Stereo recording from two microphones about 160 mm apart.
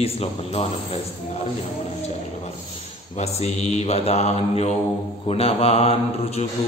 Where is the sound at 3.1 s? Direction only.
40° left (ahead or behind).